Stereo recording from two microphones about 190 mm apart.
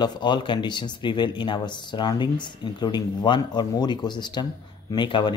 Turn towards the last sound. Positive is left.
turn(degrees=25)  # may be behind; listen again after turning